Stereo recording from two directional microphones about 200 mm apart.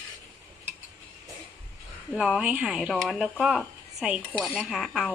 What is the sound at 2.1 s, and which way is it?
Speech, 5° right (ahead or behind).